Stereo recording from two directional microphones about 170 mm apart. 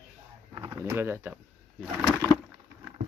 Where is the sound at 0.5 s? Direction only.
25° right (ahead or behind).